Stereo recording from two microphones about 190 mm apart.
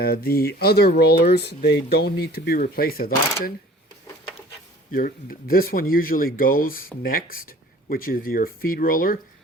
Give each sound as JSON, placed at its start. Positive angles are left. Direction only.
{"t": 0.0, "sound": "speech", "side_deg": 55}
{"t": 4.9, "sound": "speech", "side_deg": 50}